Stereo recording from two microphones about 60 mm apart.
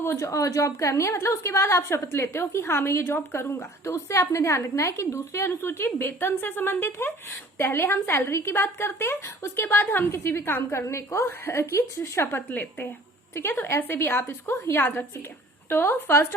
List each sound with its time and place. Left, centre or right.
0.0 s a woman's voice: left
0.3 s speech: left
3.8 s a woman's voice: left
9.6 s a woman's voice: left
10.1 s speech: left
11.3 s a woman's voice: left